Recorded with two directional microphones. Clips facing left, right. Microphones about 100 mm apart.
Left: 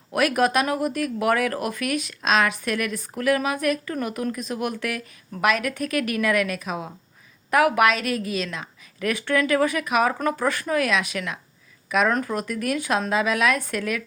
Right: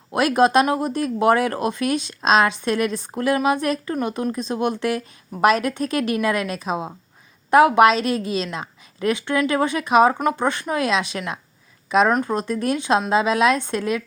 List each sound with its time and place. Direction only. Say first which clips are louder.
0.1 s speech: right 4 dB; 30° right (ahead or behind)